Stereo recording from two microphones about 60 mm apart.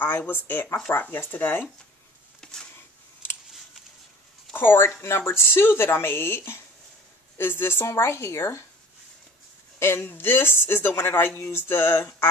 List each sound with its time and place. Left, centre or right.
0.3 s speech: left
2.4 s a sound: centre
4.6 s speech: left
7.8 s speech: left
9.8 s speech: left